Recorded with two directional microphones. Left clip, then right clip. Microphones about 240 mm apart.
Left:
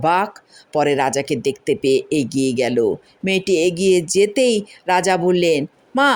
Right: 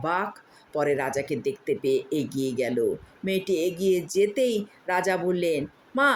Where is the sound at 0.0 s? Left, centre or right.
Left.